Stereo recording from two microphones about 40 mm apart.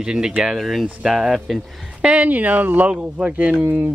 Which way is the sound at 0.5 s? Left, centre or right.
Centre.